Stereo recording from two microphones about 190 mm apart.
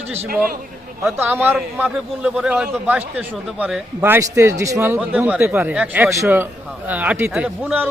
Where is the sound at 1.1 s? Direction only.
10° right (ahead or behind).